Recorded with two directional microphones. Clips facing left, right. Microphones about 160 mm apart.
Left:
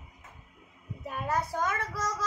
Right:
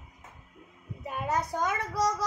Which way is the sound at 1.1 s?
15° right (ahead or behind).